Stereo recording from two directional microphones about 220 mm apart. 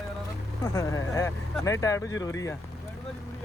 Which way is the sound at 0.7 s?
15° left (ahead or behind).